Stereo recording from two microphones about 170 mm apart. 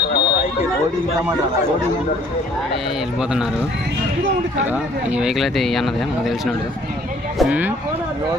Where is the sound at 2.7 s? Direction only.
5° right (ahead or behind).